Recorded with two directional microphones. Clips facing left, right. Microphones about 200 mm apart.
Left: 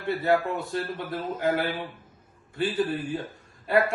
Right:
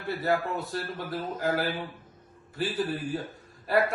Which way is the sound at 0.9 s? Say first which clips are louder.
Left 2 dB; 25° left (ahead or behind).